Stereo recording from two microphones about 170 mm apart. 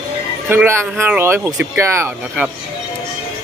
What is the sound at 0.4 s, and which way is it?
Speech, 10° right (ahead or behind).